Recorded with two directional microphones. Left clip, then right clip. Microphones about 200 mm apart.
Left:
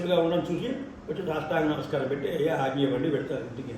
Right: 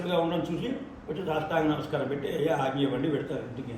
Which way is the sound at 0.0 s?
Centre (ahead or behind).